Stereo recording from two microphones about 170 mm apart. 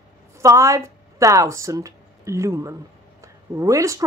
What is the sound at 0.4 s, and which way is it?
Speech, 15° right (ahead or behind).